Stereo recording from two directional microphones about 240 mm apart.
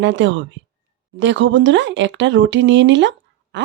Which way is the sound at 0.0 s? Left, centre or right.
Right.